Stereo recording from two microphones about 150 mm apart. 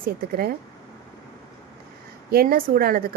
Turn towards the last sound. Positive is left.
turn(degrees=-75)  # may be behind; listen again after turning